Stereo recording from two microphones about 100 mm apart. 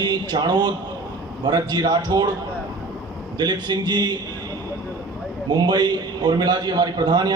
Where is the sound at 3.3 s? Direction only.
45° right (ahead or behind).